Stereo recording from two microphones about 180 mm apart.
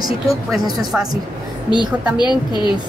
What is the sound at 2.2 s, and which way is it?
Speech, 25° left (ahead or behind).